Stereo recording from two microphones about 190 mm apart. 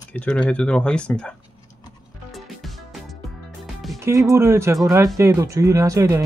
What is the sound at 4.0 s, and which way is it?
Speech, 15° right (ahead or behind).